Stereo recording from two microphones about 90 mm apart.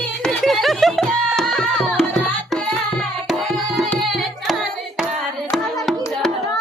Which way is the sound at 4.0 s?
Centre (ahead or behind).